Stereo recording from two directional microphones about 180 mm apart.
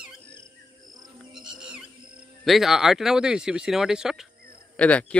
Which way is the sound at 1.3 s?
5° right (ahead or behind).